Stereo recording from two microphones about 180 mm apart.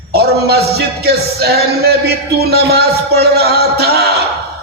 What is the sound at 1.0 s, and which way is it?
Speech, 65° right (ahead or behind).